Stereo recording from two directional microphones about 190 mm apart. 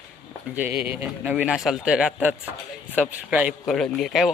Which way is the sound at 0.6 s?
10° right (ahead or behind).